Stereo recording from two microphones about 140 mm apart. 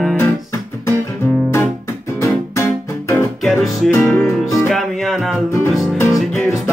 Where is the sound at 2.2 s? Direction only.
20° left (ahead or behind).